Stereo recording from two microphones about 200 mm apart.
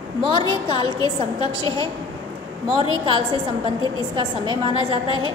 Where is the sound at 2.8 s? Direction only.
25° right (ahead or behind).